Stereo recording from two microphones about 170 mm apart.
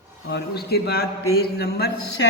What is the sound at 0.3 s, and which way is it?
A man's voice, 75° left (ahead or behind).